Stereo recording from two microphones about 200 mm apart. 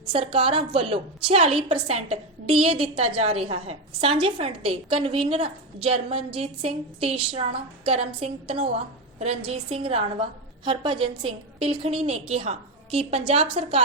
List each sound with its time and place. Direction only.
0.1 s a woman's voice: 25° right (ahead or behind)